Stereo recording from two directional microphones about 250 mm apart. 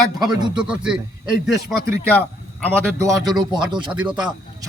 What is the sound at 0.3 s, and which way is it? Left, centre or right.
A man's voice, centre.